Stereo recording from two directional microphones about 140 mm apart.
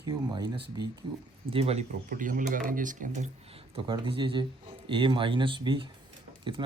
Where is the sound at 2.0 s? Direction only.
75° right (ahead or behind).